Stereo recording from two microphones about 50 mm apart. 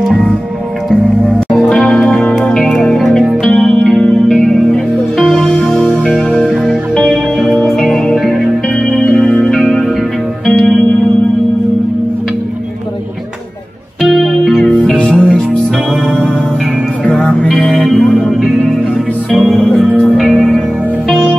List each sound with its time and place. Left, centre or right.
1.7 s music: centre
3.4 s music: centre
3.8 s music: centre
6.6 s music: centre
9.6 s music: centre
14.0 s music: centre
14.6 s music: left
17.0 s music: centre